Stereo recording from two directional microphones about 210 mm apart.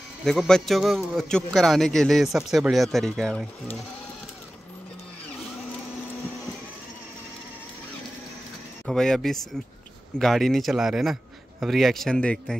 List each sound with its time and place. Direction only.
0.2 s a man's voice: centre (ahead or behind)
8.8 s a man's voice: 5° left (ahead or behind)